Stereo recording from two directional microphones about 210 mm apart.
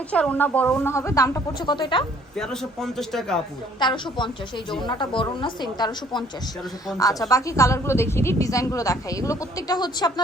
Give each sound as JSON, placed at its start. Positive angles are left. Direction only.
{"t": 0.1, "sound": "a woman's voice", "side_deg": 5}
{"t": 2.3, "sound": "a man's voice", "side_deg": 5}
{"t": 3.8, "sound": "a woman's voice", "side_deg": 20}